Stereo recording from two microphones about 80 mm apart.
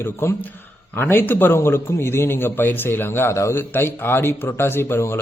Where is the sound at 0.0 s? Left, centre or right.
Left.